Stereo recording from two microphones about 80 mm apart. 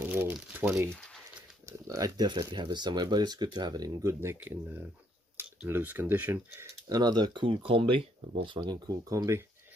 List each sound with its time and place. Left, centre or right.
0.0 s speech: right
0.8 s a sound: centre
1.7 s speech: right
2.5 s speech: right
4.0 s speech: right
6.9 s speech: right
8.5 s speech: right
9.1 s speech: right